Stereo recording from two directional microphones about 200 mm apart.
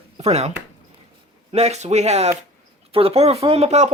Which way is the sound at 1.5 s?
35° right (ahead or behind).